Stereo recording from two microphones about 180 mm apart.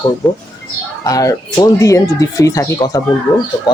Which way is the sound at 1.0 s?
20° left (ahead or behind).